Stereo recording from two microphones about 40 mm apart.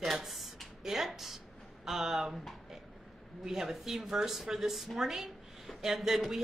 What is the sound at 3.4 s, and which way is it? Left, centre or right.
A woman's voice, centre.